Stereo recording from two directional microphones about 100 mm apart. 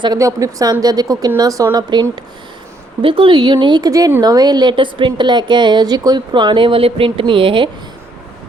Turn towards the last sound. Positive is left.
turn(degrees=-60)  # may be behind; listen again after turning